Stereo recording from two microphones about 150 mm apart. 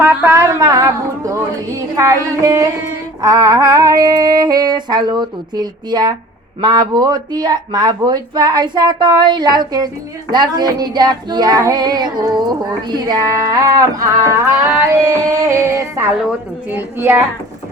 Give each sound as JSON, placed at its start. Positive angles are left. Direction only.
{"t": 0.0, "sound": "female singing", "side_deg": -15}
{"t": 16.7, "sound": "a woman's voice", "side_deg": -15}